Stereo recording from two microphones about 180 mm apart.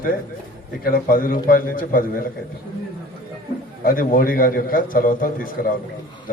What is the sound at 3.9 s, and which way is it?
A man's voice, 50° left (ahead or behind).